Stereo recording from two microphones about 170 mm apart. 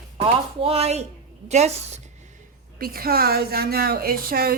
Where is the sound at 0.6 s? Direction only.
35° right (ahead or behind).